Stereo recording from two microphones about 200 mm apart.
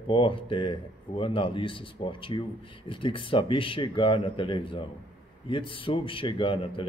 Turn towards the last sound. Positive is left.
turn(degrees=25)  # may be behind; listen again after turning